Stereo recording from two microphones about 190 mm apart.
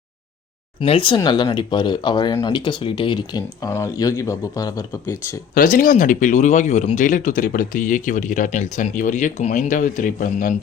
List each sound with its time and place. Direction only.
0.8 s speech: 25° left (ahead or behind)
5.5 s speech: 45° left (ahead or behind)